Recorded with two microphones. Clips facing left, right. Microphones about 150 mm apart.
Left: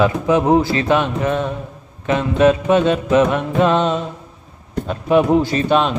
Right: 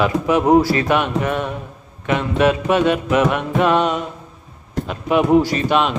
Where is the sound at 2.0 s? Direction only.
30° left (ahead or behind).